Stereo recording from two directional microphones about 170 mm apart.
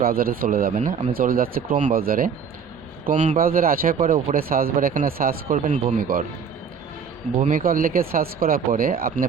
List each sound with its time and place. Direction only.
0.0 s speech: 60° right (ahead or behind)
7.3 s speech: 50° right (ahead or behind)